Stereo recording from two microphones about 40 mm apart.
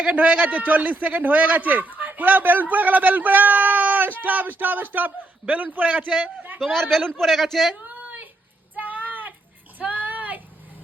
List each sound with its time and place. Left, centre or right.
0.0 s a man's voice: right
6.7 s a man's voice: centre
8.0 s a sound: right